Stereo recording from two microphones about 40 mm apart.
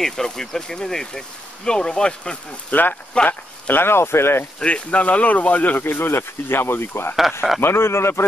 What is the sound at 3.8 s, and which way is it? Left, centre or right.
Speech, left.